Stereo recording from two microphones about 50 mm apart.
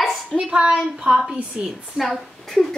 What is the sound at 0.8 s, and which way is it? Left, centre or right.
Speech, centre.